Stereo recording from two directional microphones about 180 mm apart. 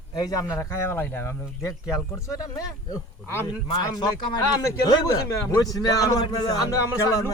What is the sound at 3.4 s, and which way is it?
A man's voice, 20° left (ahead or behind).